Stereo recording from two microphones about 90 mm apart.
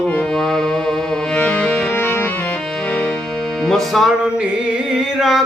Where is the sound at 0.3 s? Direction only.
5° left (ahead or behind); by 2.2 s 25° left (ahead or behind).